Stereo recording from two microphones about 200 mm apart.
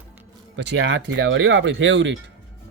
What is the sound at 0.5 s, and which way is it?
Speech, 65° right (ahead or behind).